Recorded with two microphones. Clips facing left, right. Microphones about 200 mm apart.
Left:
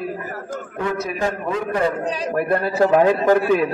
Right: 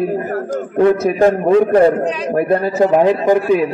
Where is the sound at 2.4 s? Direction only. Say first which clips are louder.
Right 3 dB; 20° right (ahead or behind).